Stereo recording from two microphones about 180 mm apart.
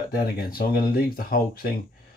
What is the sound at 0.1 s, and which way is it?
Speech, 60° left (ahead or behind).